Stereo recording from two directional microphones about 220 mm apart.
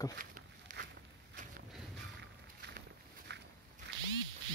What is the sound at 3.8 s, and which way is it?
Quack, 50° right (ahead or behind).